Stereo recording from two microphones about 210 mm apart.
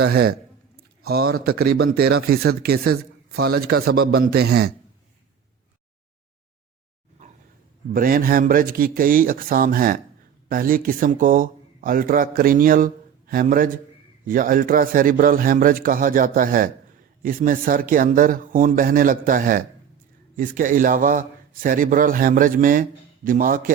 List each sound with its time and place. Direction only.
0.0 s speech: 50° right (ahead or behind)
7.9 s a man's voice: 45° right (ahead or behind)